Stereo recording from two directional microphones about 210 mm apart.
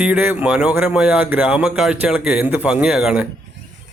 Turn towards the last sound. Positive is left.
turn(degrees=-5)  # may be behind; listen again after turning